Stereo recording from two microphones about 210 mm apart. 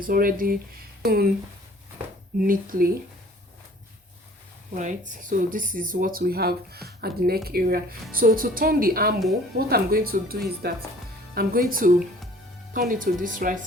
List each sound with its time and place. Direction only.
0.0 s speech: 40° right (ahead or behind)
2.4 s speech: 45° right (ahead or behind)
4.8 s speech: 35° right (ahead or behind)